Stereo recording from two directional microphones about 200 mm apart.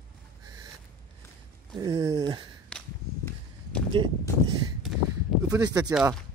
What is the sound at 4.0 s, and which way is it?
Speech, 25° right (ahead or behind).